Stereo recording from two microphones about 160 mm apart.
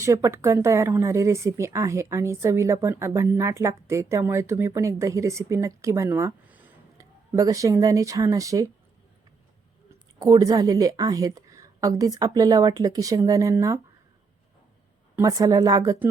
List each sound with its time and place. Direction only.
0.0 s speech: 20° right (ahead or behind)
10.2 s a woman's voice: 20° right (ahead or behind)
15.1 s a woman's voice: 20° right (ahead or behind)